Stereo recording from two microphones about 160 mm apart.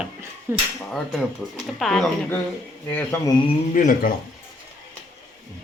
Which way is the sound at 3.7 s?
55° left (ahead or behind).